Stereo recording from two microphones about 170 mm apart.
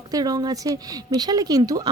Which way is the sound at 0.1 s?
20° right (ahead or behind).